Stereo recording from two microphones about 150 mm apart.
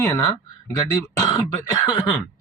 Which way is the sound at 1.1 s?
25° left (ahead or behind).